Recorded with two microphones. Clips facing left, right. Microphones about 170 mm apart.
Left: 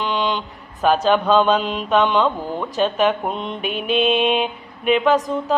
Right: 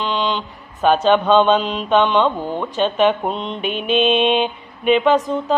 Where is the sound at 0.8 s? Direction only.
Centre (ahead or behind).